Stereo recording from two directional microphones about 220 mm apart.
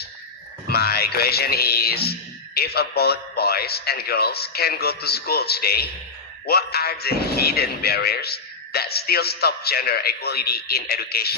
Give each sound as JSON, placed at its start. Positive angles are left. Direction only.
{"t": 0.7, "sound": "a man's voice", "side_deg": 45}